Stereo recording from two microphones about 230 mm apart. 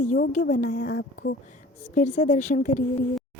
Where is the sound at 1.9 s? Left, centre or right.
Left.